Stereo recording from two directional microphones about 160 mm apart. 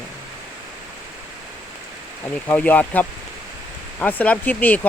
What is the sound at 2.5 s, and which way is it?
Speech, 10° left (ahead or behind).